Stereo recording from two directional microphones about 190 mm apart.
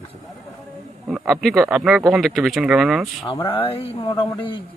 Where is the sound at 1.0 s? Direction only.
Centre (ahead or behind).